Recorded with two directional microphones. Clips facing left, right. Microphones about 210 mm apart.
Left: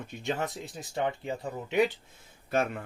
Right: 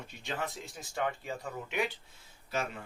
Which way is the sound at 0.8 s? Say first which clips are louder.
Left 4 dB; 20° left (ahead or behind).